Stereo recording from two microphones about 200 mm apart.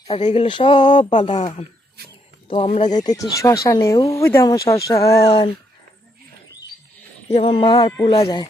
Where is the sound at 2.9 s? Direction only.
20° left (ahead or behind).